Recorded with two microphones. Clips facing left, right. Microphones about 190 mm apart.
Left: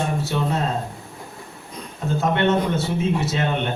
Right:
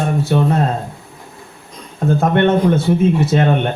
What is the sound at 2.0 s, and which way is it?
A man's voice, 55° right (ahead or behind).